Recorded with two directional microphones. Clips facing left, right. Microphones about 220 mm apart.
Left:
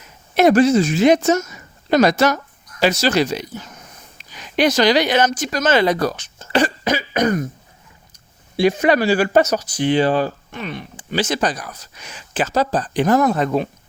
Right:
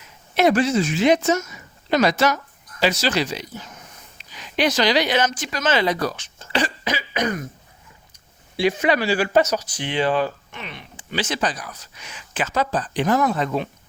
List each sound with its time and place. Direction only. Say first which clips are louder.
0.3 s speech: left 5 dB; 45° left (ahead or behind)
8.5 s speech: left 4 dB; 45° left (ahead or behind)